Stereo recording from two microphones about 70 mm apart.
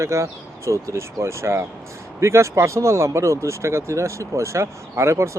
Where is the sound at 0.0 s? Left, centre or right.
Right.